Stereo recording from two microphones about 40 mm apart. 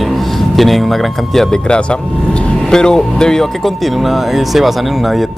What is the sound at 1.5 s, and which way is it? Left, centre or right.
Speech, left.